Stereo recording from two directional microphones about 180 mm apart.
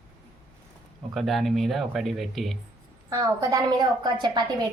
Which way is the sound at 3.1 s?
20° right (ahead or behind).